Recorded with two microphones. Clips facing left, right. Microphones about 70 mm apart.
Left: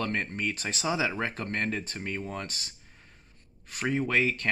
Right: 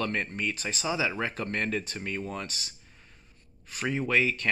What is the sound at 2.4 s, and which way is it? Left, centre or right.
Speech, left.